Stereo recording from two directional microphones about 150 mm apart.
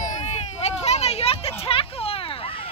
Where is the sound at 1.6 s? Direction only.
40° left (ahead or behind).